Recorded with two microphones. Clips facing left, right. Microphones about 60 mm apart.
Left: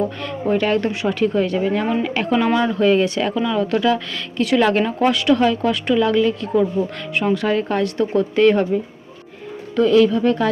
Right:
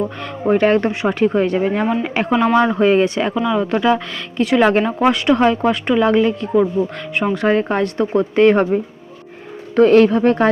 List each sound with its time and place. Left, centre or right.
0.4 s speech: right
3.3 s speech: centre
7.3 s speech: right
9.7 s speech: right